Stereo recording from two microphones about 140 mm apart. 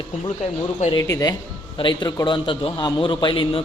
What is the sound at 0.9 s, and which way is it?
A man's voice, 25° left (ahead or behind).